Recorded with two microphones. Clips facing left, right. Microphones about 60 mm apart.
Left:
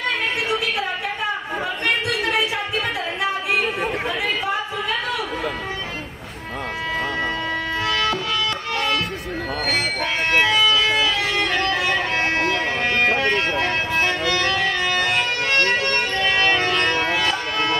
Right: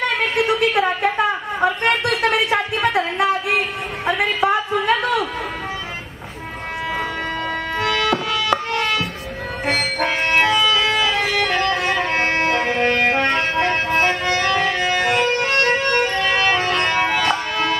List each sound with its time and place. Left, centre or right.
0.4 s a sound: right
2.5 s music: right
4.2 s a sound: right
7.9 s music: centre
10.4 s music: centre
12.2 s music: right
12.4 s music: centre
13.2 s a sound: centre
14.3 s music: centre
17.2 s music: centre